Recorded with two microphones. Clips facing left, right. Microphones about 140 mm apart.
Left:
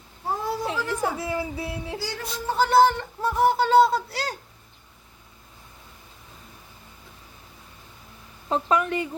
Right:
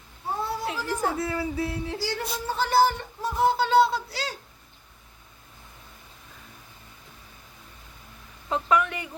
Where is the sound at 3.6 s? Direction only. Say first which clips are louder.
Left 3 dB; 45° left (ahead or behind).